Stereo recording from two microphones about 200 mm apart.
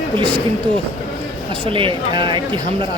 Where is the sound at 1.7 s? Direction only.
25° right (ahead or behind).